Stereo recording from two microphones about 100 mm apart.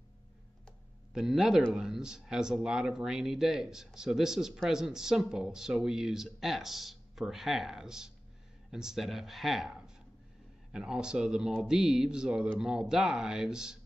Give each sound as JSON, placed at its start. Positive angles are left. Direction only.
{"t": 1.1, "sound": "speech", "side_deg": -5}